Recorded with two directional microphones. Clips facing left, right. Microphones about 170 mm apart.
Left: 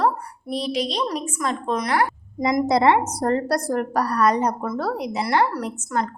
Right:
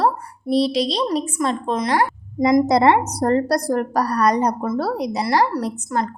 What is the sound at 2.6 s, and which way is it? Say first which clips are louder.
A woman's voice: right 1 dB; 40° right (ahead or behind).